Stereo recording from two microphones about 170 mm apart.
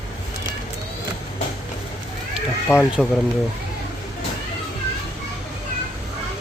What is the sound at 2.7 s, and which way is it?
Speech, 15° left (ahead or behind).